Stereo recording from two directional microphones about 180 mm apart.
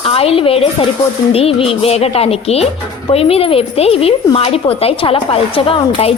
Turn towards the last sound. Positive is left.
turn(degrees=30)  # may be behind; listen again after turning